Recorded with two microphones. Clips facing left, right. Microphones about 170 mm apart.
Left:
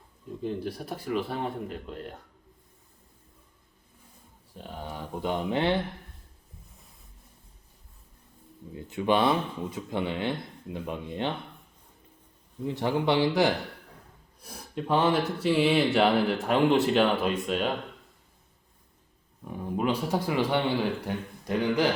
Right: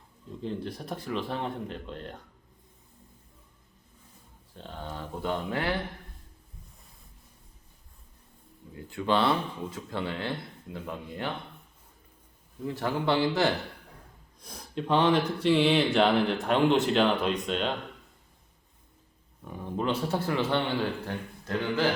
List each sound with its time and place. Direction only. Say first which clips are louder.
0.4 s speech: left 2 dB; 5° left (ahead or behind)
4.5 s speech: left 1 dB; 10° left (ahead or behind)
8.7 s speech: left 2 dB; 20° left (ahead or behind)
12.6 s speech: left 2 dB; 20° left (ahead or behind)
19.5 s speech: left 2 dB; 10° left (ahead or behind)